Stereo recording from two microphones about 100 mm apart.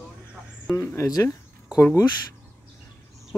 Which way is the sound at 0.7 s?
30° left (ahead or behind).